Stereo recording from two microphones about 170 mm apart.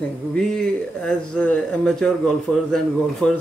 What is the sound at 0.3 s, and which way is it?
Speech, 5° left (ahead or behind).